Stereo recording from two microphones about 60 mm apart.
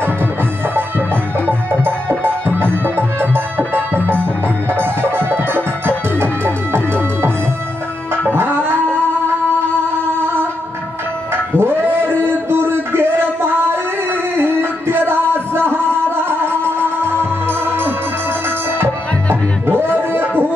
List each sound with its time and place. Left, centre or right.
1.9 s music: right
8.5 s dog: right
11.5 s a sound: right
14.3 s music: right
19.7 s music: right